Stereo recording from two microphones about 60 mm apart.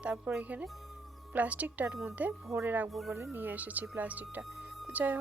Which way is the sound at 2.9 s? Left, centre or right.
Centre.